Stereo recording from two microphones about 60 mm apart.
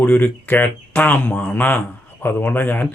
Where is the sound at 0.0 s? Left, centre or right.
Left.